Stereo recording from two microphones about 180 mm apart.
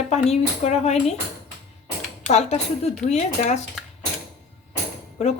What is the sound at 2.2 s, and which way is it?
A woman's voice, 40° left (ahead or behind).